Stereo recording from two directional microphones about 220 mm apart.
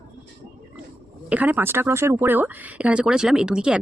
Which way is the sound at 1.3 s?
5° right (ahead or behind).